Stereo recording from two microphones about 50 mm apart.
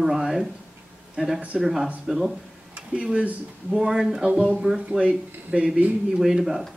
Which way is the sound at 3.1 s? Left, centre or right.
Right.